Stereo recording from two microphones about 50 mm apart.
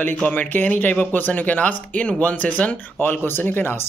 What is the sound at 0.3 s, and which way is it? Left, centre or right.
Speech, left.